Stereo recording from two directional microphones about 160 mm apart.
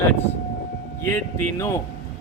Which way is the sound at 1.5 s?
15° left (ahead or behind).